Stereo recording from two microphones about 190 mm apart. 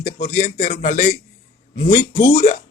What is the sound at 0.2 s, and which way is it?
Speech, 40° left (ahead or behind).